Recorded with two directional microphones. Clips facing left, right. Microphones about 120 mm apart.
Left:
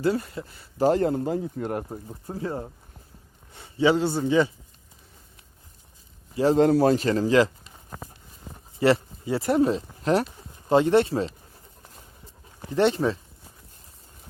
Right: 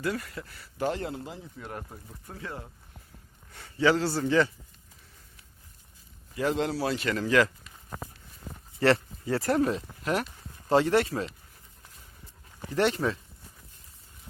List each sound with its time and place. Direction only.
0.0 s a man's voice: 30° left (ahead or behind)
0.9 s speech: 45° left (ahead or behind)
1.9 s a man's voice: 30° left (ahead or behind)
6.3 s speech: 35° left (ahead or behind)
6.7 s speech: 45° left (ahead or behind); by 7.7 s 30° left (ahead or behind)
8.8 s speech: 25° left (ahead or behind)
10.0 s speech: 35° left (ahead or behind)
10.7 s a man's voice: 20° left (ahead or behind)
12.7 s a man's voice: 25° left (ahead or behind)